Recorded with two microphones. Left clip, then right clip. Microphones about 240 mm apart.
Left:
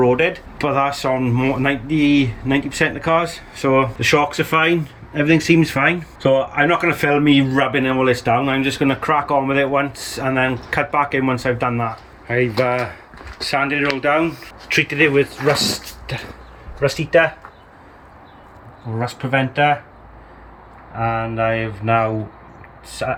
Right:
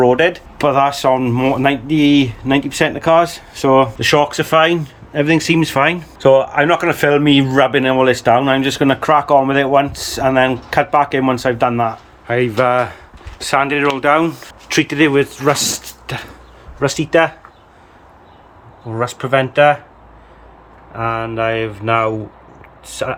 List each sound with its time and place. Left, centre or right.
0.0 s speech: right
12.3 s speech: centre
18.9 s speech: centre
20.9 s speech: centre